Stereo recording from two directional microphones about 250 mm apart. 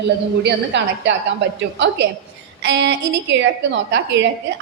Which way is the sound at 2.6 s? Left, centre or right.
Right.